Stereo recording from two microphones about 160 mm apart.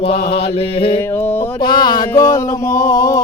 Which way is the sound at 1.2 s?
10° left (ahead or behind).